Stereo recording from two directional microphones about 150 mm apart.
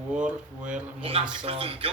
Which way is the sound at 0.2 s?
5° right (ahead or behind).